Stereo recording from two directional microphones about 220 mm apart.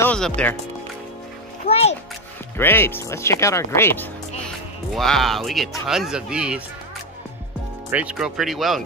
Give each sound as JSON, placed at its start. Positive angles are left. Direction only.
{"t": 0.0, "sound": "speech", "side_deg": 5}
{"t": 1.7, "sound": "a child's voice", "side_deg": 30}
{"t": 2.5, "sound": "speech", "side_deg": 10}
{"t": 7.9, "sound": "speech", "side_deg": -5}